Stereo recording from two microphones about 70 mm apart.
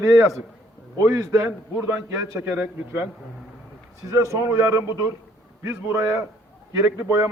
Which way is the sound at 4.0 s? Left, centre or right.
Right.